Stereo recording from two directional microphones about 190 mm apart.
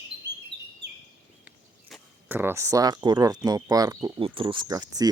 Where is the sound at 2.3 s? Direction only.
10° right (ahead or behind).